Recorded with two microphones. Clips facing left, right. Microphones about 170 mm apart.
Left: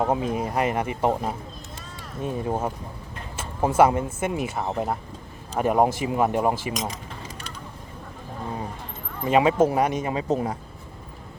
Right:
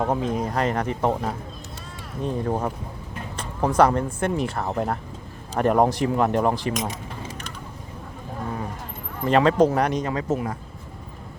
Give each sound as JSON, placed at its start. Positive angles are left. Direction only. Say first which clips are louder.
{"t": 0.0, "sound": "speech", "louder": "even", "side_deg": 10}
{"t": 3.8, "sound": "speech", "louder": "even", "side_deg": 5}
{"t": 9.2, "sound": "speech", "louder": "right 1 dB", "side_deg": 10}
{"t": 10.1, "sound": "speech", "louder": "even", "side_deg": 15}
{"t": 10.3, "sound": "speech", "louder": "left 1 dB", "side_deg": 35}